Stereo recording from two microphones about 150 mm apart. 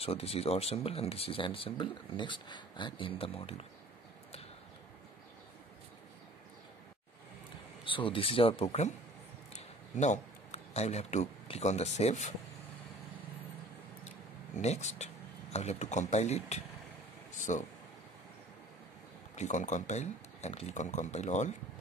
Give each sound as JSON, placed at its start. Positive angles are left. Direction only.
{"t": 0.0, "sound": "speech", "side_deg": 40}
{"t": 7.8, "sound": "speech", "side_deg": 35}
{"t": 14.0, "sound": "a sound", "side_deg": 50}
{"t": 15.5, "sound": "speech", "side_deg": 45}
{"t": 19.3, "sound": "speech", "side_deg": 50}